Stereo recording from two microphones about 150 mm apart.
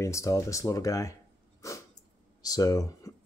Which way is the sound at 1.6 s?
20° left (ahead or behind).